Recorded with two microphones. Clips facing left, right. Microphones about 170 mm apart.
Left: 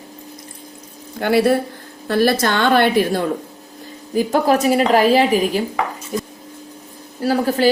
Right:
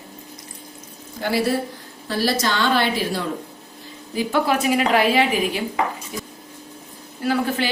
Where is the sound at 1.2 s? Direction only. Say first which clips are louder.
Left 6 dB; 60° left (ahead or behind).